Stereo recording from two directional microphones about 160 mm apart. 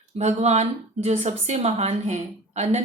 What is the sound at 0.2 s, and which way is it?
Speech, 45° right (ahead or behind).